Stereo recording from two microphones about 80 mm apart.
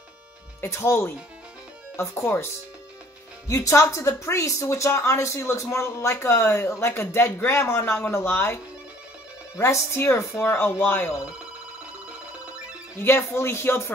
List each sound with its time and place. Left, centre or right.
0.6 s a woman's voice: left
3.4 s a woman's voice: left
9.6 s speech: left
13.0 s a woman's voice: left